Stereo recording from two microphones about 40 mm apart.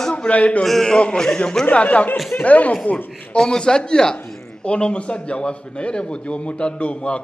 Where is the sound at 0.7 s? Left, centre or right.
Centre.